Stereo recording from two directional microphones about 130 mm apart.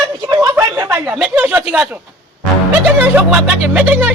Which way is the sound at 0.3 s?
25° right (ahead or behind).